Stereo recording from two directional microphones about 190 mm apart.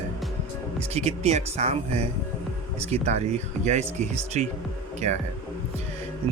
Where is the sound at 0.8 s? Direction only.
35° right (ahead or behind).